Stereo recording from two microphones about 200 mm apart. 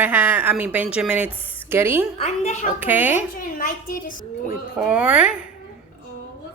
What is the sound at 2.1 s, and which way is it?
Speech, 35° left (ahead or behind).